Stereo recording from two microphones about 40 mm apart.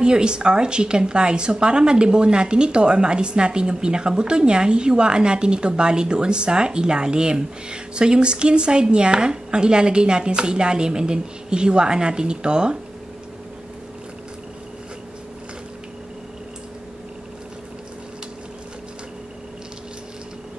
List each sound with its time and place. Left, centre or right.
0.0 s a woman's voice: right